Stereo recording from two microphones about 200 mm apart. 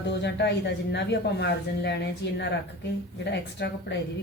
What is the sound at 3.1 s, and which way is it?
Speech, 55° left (ahead or behind).